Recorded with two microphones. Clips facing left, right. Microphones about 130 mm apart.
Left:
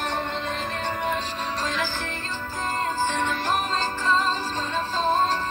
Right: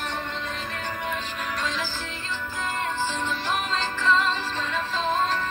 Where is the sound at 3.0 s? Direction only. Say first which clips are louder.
Left 3 dB; 55° left (ahead or behind).